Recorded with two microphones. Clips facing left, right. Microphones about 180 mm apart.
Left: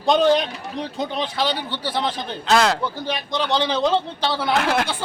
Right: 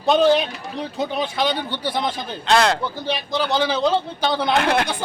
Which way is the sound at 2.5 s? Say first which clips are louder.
Even; centre (ahead or behind).